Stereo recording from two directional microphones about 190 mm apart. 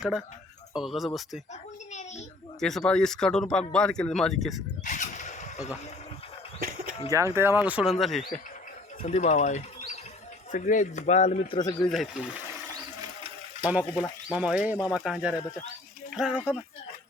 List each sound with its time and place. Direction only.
0.0 s speech: centre (ahead or behind)
1.9 s a sound: 35° left (ahead or behind)
2.6 s speech: centre (ahead or behind)
4.8 s a sound: 40° left (ahead or behind)
6.6 s a sound: 50° right (ahead or behind)
7.1 s speech: 15° right (ahead or behind); by 8.3 s centre (ahead or behind)
9.0 s a man's voice: 35° left (ahead or behind)
11.6 s speech: 20° left (ahead or behind)
11.9 s speech: centre (ahead or behind)
14.0 s speech: 5° right (ahead or behind)